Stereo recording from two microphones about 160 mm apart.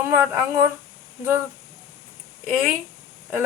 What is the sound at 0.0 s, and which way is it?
Speech, 20° right (ahead or behind).